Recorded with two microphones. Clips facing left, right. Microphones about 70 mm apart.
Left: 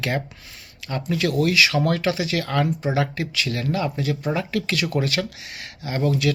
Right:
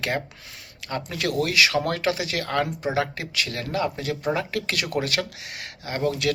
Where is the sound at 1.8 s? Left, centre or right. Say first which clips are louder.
Left 3 dB; right.